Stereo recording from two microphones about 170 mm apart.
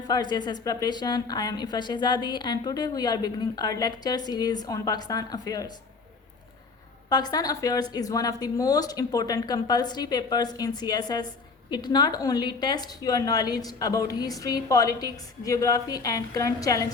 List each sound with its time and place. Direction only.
0.1 s a woman's voice: 25° left (ahead or behind)
7.1 s a woman's voice: 25° left (ahead or behind)